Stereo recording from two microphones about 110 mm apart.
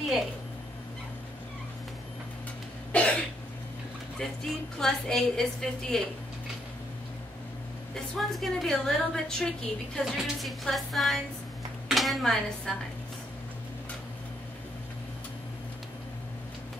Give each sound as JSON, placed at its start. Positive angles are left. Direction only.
{"t": 2.9, "sound": "cough", "side_deg": 10}
{"t": 4.2, "sound": "a woman's voice", "side_deg": 5}
{"t": 7.9, "sound": "a woman's voice", "side_deg": 0}